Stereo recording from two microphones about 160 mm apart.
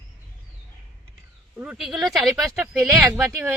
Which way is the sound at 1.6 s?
5° right (ahead or behind).